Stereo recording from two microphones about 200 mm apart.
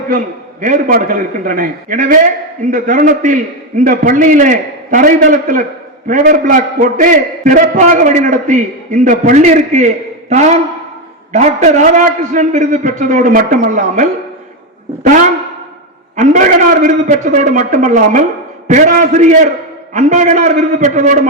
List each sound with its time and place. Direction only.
0.6 s a man's voice: 45° right (ahead or behind)
16.1 s a man's voice: 35° right (ahead or behind)